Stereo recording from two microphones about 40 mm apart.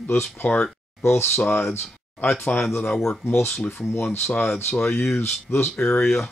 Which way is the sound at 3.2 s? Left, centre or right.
Left.